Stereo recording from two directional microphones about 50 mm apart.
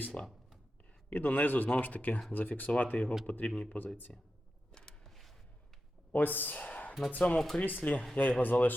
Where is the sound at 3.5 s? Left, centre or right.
Left.